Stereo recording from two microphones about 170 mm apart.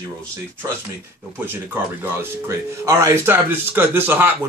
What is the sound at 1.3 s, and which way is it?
Speech, 15° right (ahead or behind).